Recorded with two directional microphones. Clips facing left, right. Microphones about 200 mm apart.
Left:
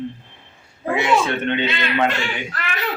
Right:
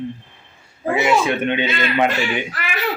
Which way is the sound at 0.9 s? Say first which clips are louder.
Right 2 dB; 5° right (ahead or behind).